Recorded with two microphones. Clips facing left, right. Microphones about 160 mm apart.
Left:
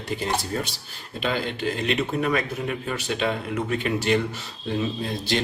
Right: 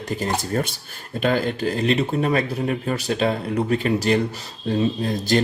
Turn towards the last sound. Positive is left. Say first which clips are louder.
# right 5 dB
turn(degrees=-45)  # may be behind; listen again after turning